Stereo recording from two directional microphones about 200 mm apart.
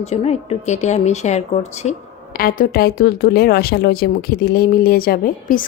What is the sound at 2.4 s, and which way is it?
Speech, 45° left (ahead or behind).